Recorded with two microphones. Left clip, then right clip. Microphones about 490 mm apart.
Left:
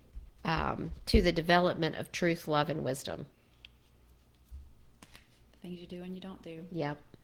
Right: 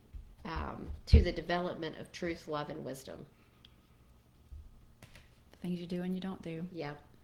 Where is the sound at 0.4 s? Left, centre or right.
Left.